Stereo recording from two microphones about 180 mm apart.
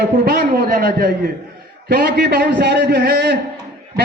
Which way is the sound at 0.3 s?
55° right (ahead or behind).